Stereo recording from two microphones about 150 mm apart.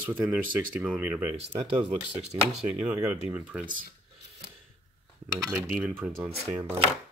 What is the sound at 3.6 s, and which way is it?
Speech, 65° right (ahead or behind).